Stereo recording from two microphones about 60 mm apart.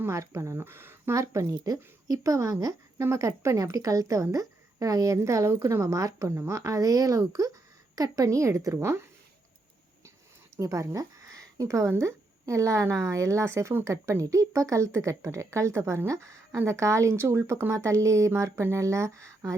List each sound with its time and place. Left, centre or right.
0.0 s speech: right
1.1 s speech: right
3.0 s speech: right
5.8 s speech: right
7.9 s speech: right
8.8 s speech: right
10.6 s a woman's voice: right